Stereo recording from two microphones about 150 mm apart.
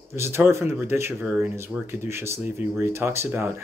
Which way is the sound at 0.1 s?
15° right (ahead or behind).